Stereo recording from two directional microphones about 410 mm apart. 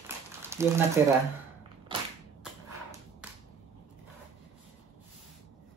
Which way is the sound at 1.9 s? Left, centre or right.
Centre.